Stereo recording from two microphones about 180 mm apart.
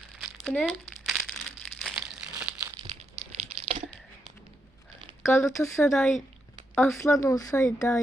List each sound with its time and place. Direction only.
0.2 s crumpling: 5° left (ahead or behind)
3.6 s a sound: 35° right (ahead or behind)
5.2 s speech: 15° left (ahead or behind)
5.9 s speech: centre (ahead or behind)